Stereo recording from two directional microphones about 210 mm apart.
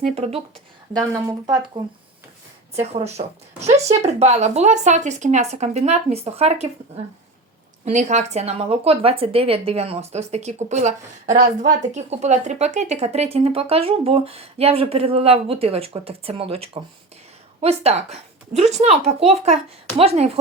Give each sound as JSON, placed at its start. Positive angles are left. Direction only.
{"t": 0.0, "sound": "speech", "side_deg": -30}
{"t": 1.1, "sound": "speech", "side_deg": -20}
{"t": 2.7, "sound": "speech", "side_deg": -30}